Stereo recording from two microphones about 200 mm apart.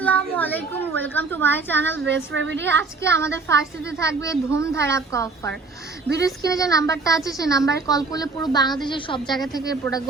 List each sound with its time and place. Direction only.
0.0 s a woman's voice: 10° left (ahead or behind)
2.0 s speech: 65° right (ahead or behind)
2.6 s a woman's voice: 10° left (ahead or behind)